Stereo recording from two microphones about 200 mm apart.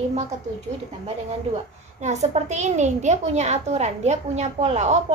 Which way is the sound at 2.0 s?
35° right (ahead or behind).